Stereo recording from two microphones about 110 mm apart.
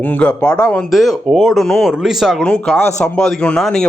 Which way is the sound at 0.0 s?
15° left (ahead or behind).